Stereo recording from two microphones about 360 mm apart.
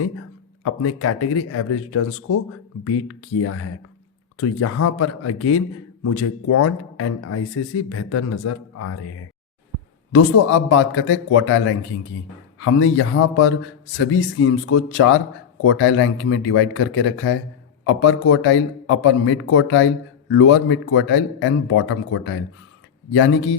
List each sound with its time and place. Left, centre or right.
0.6 s a man's voice: left